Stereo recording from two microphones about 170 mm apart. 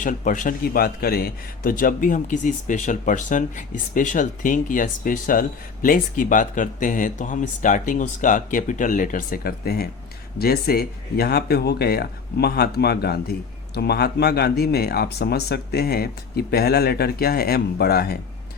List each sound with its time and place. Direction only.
0.0 s a man's voice: 50° left (ahead or behind); by 18.2 s 65° left (ahead or behind)